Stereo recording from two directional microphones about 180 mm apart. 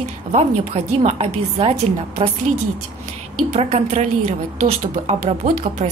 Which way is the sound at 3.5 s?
35° right (ahead or behind).